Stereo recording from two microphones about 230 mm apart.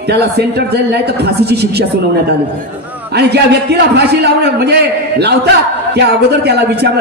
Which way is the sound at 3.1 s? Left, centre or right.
Right.